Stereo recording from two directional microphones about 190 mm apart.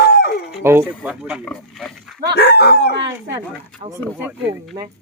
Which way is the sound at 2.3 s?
60° left (ahead or behind).